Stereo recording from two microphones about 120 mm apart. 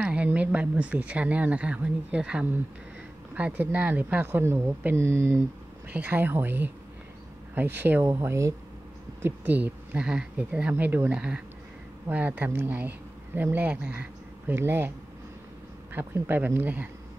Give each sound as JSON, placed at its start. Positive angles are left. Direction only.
{"t": 0.0, "sound": "speech", "side_deg": -10}
{"t": 15.9, "sound": "speech", "side_deg": -15}